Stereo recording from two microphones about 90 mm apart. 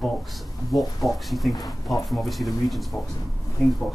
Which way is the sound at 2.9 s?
25° left (ahead or behind).